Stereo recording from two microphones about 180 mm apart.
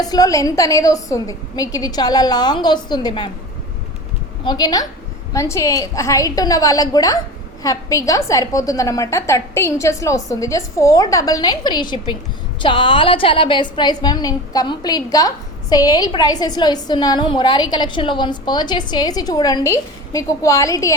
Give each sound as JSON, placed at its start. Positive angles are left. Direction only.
{"t": 0.0, "sound": "a woman's voice", "side_deg": 20}
{"t": 4.4, "sound": "a woman's voice", "side_deg": 20}